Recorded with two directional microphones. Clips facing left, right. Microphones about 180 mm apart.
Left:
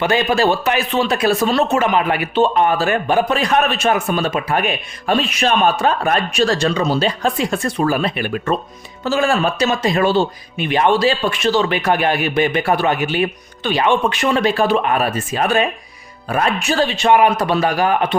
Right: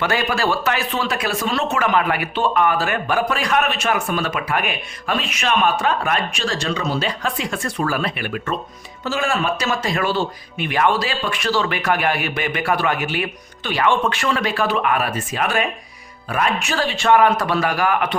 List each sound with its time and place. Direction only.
0.0 s speech: 20° left (ahead or behind)
9.6 s speech: 20° left (ahead or behind)
16.8 s speech: 20° left (ahead or behind)